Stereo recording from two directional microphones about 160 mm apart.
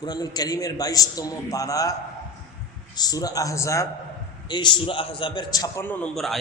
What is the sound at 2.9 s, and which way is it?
Speech, 25° left (ahead or behind).